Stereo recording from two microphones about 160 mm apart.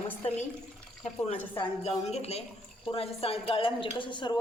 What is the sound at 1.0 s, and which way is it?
A woman's voice, 40° left (ahead or behind).